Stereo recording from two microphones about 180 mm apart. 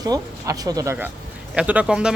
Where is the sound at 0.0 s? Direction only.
20° right (ahead or behind).